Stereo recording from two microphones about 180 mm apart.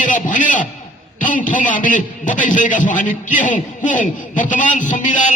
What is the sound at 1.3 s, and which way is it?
A man's voice, 45° left (ahead or behind).